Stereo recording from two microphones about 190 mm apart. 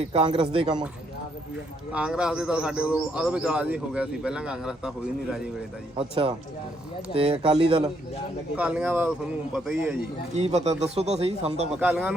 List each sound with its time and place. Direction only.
0.5 s speech: 25° right (ahead or behind)
1.9 s speech: 5° right (ahead or behind)
6.0 s speech: 30° right (ahead or behind)
8.5 s a man's voice: 5° right (ahead or behind)
10.3 s speech: 35° right (ahead or behind)
11.8 s a man's voice: 5° right (ahead or behind)